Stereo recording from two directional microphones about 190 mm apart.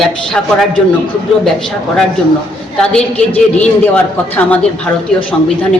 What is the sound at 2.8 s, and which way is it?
A man's voice, 5° left (ahead or behind).